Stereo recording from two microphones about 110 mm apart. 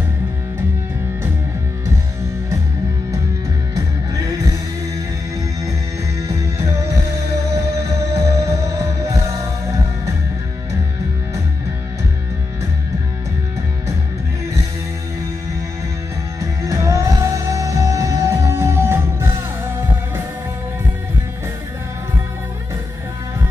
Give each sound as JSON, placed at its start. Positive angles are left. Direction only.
{"t": 3.7, "sound": "music", "side_deg": -30}
{"t": 6.2, "sound": "music", "side_deg": -30}
{"t": 16.3, "sound": "music", "side_deg": -30}